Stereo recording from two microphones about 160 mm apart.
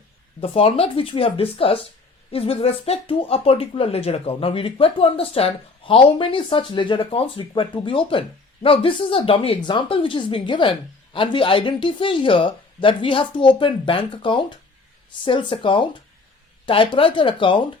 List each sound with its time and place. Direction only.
0.3 s speech: 35° left (ahead or behind)